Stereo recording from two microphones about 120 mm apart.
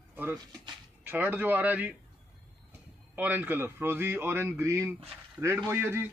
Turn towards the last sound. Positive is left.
turn(degrees=-20)  # may be behind; listen again after turning